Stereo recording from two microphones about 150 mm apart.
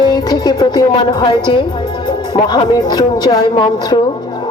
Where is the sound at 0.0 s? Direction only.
25° left (ahead or behind).